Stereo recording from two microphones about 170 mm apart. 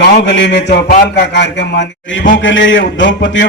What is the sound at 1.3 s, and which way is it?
A man's voice, 90° left.